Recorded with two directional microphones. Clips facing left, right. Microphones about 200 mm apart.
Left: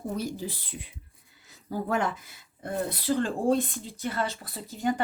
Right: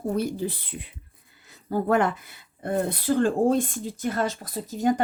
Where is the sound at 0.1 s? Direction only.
60° right (ahead or behind).